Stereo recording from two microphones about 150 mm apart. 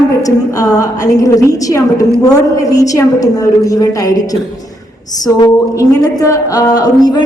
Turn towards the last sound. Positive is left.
turn(degrees=25)  # may be behind; listen again after turning